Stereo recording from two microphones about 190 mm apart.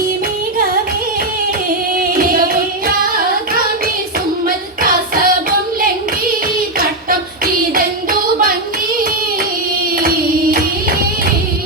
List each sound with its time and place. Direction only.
2.0 s singing: 50° right (ahead or behind)
4.4 s music: 50° right (ahead or behind)